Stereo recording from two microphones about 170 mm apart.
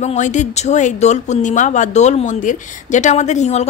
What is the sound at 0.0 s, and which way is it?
Speech, 45° left (ahead or behind).